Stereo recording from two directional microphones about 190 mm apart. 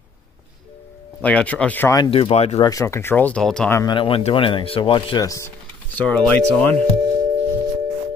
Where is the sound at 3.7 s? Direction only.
25° left (ahead or behind).